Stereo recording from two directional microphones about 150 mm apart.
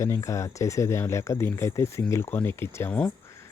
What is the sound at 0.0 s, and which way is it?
A man's voice, 20° left (ahead or behind).